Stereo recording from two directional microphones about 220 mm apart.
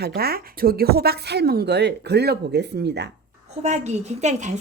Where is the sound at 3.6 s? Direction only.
30° right (ahead or behind).